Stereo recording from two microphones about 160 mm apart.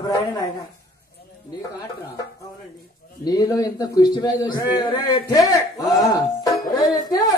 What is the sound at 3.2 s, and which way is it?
Speech, 25° left (ahead or behind).